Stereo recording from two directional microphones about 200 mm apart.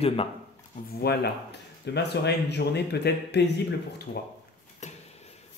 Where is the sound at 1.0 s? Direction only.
50° left (ahead or behind).